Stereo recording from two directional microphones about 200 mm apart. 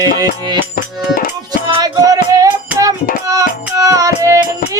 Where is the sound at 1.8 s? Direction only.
20° right (ahead or behind).